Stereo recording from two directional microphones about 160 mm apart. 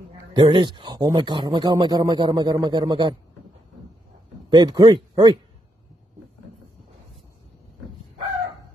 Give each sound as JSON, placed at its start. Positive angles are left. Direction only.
{"t": 0.3, "sound": "a man's voice", "side_deg": -30}
{"t": 4.5, "sound": "speech", "side_deg": -30}